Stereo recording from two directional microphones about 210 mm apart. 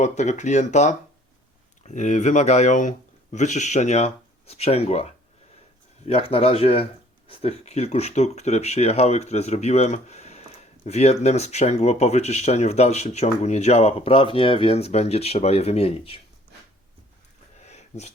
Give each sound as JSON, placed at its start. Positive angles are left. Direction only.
{"t": 0.0, "sound": "speech", "side_deg": 35}
{"t": 6.1, "sound": "speech", "side_deg": 25}
{"t": 17.7, "sound": "a sound", "side_deg": 30}